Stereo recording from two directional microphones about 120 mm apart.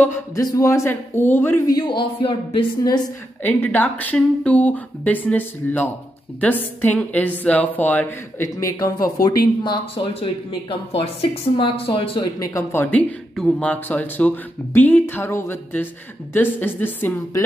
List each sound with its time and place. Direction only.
0.5 s speech: 25° left (ahead or behind)
1.7 s a woman's voice: 40° left (ahead or behind)
3.4 s speech: 15° left (ahead or behind)
8.5 s speech: 30° left (ahead or behind)
10.2 s speech: 45° left (ahead or behind)
12.4 s speech: 25° left (ahead or behind)
12.8 s speech: 10° left (ahead or behind)